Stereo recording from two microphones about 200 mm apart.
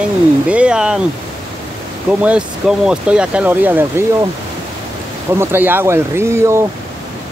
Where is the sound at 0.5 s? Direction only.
5° right (ahead or behind).